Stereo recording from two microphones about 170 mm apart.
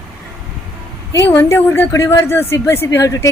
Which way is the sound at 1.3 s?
15° left (ahead or behind).